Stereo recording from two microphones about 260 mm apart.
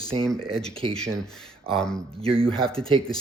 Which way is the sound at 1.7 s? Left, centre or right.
Centre.